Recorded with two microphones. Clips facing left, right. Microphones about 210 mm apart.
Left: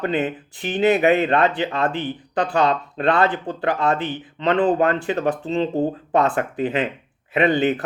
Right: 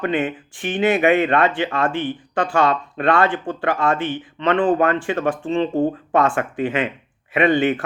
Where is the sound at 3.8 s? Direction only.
40° left (ahead or behind).